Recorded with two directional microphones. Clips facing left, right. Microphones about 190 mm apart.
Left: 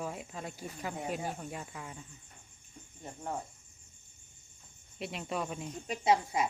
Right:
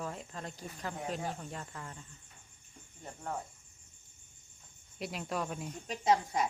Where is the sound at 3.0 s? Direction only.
15° left (ahead or behind).